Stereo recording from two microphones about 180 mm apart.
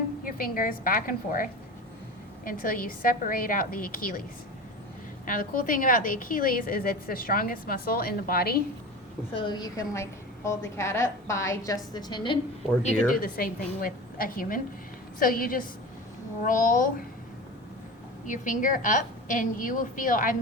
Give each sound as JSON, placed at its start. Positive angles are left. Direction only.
{"t": 0.3, "sound": "a woman's voice", "side_deg": 50}
{"t": 5.2, "sound": "a woman's voice", "side_deg": 50}
{"t": 9.3, "sound": "a woman's voice", "side_deg": 25}
{"t": 13.1, "sound": "a woman's voice", "side_deg": 50}
{"t": 18.3, "sound": "a woman's voice", "side_deg": 45}